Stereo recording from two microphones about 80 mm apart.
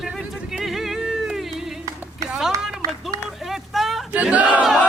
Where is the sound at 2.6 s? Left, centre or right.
Centre.